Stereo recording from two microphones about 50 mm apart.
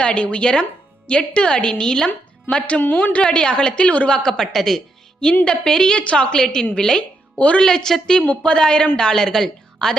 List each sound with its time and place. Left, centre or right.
0.0 s a woman's voice: left
2.0 s a woman's voice: left
7.3 s a woman's voice: left
7.6 s a woman's voice: centre